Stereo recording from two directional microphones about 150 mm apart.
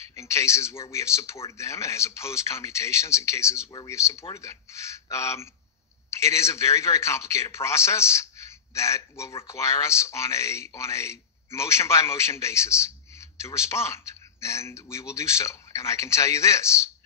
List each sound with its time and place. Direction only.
0.1 s speech: 20° left (ahead or behind)